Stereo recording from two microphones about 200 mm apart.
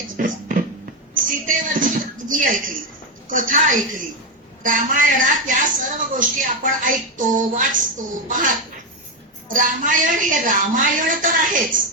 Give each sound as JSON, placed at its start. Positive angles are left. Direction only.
{"t": 0.2, "sound": "music", "side_deg": -40}
{"t": 1.1, "sound": "a sound", "side_deg": -40}
{"t": 3.2, "sound": "a woman's voice", "side_deg": -40}
{"t": 9.5, "sound": "a woman's voice", "side_deg": -40}